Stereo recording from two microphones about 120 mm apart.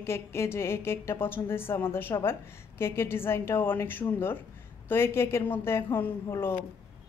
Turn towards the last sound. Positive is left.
turn(degrees=20)  # may be behind; listen again after turning